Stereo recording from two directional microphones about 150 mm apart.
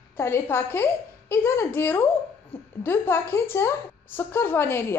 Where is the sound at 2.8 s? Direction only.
15° left (ahead or behind).